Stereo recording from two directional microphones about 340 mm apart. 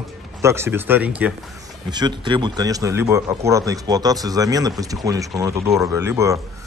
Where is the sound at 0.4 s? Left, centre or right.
Centre.